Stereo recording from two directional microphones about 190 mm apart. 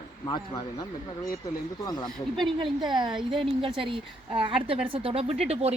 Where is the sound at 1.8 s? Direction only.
20° left (ahead or behind).